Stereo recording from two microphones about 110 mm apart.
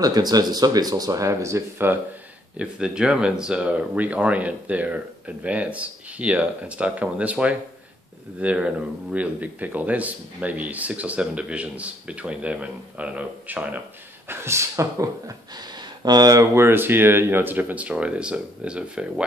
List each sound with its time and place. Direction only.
0.0 s speech: 35° right (ahead or behind)
2.5 s speech: 10° right (ahead or behind); by 16.4 s 35° right (ahead or behind)
16.5 s speech: 20° right (ahead or behind)